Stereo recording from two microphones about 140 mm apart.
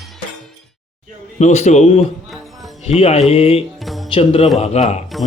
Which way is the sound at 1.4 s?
55° left (ahead or behind).